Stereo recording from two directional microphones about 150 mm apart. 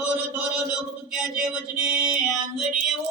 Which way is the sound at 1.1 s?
10° right (ahead or behind).